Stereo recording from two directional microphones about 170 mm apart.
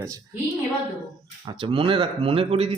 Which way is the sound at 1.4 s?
30° right (ahead or behind).